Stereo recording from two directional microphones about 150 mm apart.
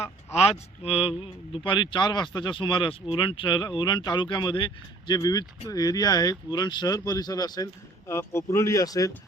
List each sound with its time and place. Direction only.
0.9 s music: 40° left (ahead or behind)
1.5 s speech: 35° left (ahead or behind)